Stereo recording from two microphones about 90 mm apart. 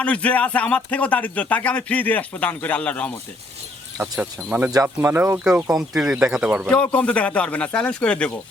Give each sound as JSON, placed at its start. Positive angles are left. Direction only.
{"t": 0.0, "sound": "speech", "side_deg": 15}
{"t": 4.2, "sound": "speech", "side_deg": -15}
{"t": 5.5, "sound": "speech", "side_deg": -5}
{"t": 6.7, "sound": "speech", "side_deg": 15}